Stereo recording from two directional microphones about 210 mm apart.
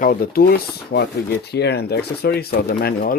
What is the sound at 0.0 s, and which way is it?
Speech, 45° left (ahead or behind).